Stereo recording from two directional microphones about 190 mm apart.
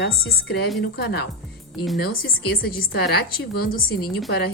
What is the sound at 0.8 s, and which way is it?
A woman's voice, 60° left (ahead or behind).